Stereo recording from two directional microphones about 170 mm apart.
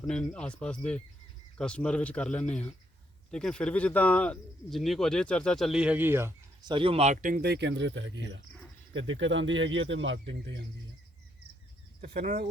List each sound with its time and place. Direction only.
0.1 s speech: 5° left (ahead or behind); by 6.3 s 15° right (ahead or behind)
6.6 s speech: 25° right (ahead or behind); by 10.7 s 90° right
12.0 s speech: 55° right (ahead or behind)